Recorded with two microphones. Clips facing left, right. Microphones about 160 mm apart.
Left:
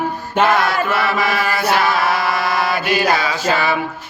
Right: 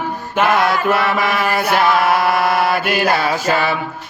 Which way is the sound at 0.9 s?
55° right (ahead or behind).